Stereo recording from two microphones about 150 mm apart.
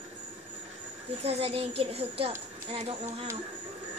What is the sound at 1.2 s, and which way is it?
A woman's voice, 40° right (ahead or behind).